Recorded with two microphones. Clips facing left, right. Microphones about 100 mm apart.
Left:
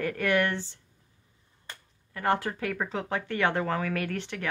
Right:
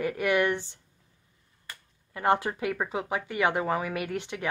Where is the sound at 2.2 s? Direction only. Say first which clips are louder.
Right 2 dB; 20° right (ahead or behind).